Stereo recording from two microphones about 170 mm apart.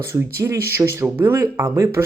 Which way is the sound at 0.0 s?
15° right (ahead or behind).